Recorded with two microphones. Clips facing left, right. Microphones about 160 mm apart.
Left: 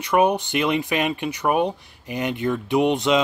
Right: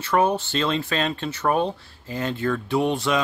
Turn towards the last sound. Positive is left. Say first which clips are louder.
# left 3 dB
turn(degrees=20)  # may be behind; listen again after turning